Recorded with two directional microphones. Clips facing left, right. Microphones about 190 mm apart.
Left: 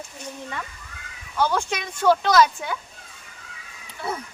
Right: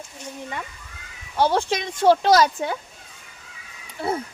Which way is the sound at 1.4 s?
30° right (ahead or behind).